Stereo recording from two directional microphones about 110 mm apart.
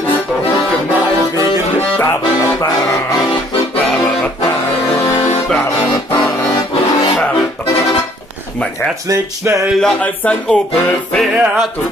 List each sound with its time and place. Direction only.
9.1 s speech: 30° right (ahead or behind)
9.8 s speech: 10° left (ahead or behind)
11.1 s music: centre (ahead or behind)